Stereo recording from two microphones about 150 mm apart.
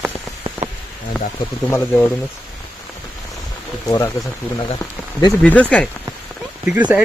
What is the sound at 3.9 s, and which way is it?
Speech, 25° left (ahead or behind).